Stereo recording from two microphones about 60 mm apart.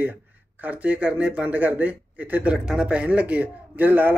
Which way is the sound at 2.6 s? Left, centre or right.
Centre.